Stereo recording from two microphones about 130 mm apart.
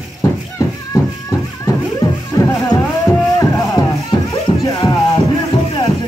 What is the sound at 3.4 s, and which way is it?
Music, 25° left (ahead or behind).